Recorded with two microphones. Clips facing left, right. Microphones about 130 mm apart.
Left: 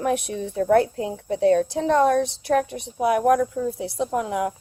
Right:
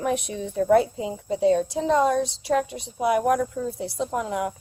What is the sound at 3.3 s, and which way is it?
A woman's voice, 65° left (ahead or behind).